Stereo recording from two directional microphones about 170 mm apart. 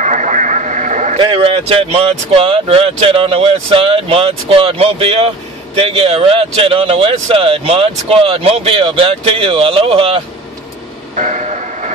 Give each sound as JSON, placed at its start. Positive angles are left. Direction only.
{"t": 0.0, "sound": "radio", "side_deg": -45}
{"t": 1.1, "sound": "speech", "side_deg": -30}
{"t": 11.1, "sound": "train", "side_deg": -45}